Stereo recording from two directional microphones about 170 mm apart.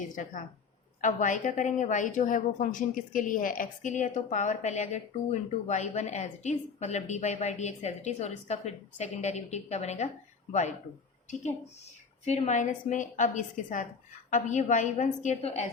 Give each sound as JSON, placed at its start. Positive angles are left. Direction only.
{"t": 1.0, "sound": "a woman's voice", "side_deg": 50}
{"t": 12.2, "sound": "a woman's voice", "side_deg": 40}